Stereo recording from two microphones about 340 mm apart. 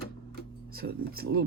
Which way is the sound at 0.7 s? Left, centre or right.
Right.